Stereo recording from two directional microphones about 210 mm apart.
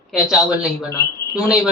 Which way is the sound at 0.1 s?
5° right (ahead or behind).